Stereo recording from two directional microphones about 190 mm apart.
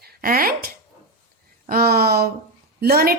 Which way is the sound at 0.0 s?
50° right (ahead or behind).